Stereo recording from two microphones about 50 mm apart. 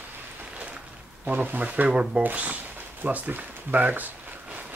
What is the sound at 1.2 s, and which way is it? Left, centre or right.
Speech, right.